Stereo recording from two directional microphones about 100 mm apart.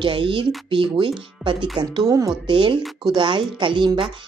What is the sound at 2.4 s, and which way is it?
Speech, 55° right (ahead or behind).